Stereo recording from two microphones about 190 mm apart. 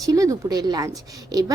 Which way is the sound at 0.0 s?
20° right (ahead or behind).